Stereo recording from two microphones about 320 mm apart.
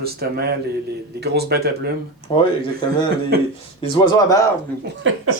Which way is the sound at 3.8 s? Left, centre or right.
Centre.